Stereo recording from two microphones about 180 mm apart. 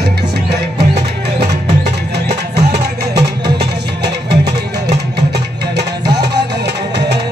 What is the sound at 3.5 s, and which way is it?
Music, 70° right (ahead or behind).